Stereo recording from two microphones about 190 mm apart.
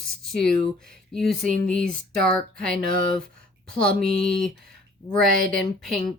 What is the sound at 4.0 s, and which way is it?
Speech, 50° right (ahead or behind).